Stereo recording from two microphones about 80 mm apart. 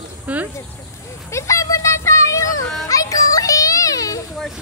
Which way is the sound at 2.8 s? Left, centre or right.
Left.